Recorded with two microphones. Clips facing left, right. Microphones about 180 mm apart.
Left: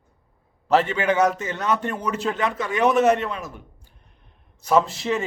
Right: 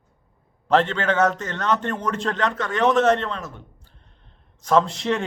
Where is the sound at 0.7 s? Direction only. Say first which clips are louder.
Even; 10° left (ahead or behind).